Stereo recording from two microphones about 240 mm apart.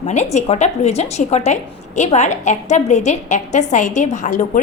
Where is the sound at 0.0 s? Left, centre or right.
Left.